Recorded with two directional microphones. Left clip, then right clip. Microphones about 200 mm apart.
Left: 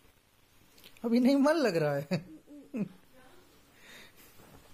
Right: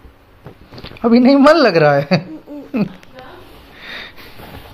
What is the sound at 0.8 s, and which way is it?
Speech, 30° left (ahead or behind).